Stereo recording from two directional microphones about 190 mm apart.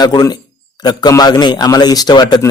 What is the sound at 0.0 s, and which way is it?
Speech, 20° left (ahead or behind).